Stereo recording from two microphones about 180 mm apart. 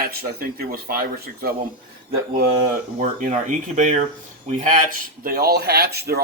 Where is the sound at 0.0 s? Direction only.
55° right (ahead or behind).